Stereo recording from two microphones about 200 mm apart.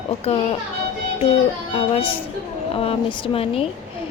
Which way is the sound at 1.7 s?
30° left (ahead or behind).